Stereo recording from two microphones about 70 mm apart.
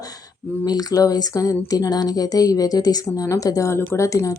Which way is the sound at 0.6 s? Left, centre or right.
Left.